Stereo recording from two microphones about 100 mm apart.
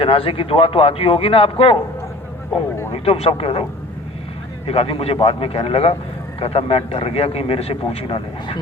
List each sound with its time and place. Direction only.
0.0 s speech: 70° left (ahead or behind)
2.9 s speech: 85° left; by 8.5 s 60° left (ahead or behind)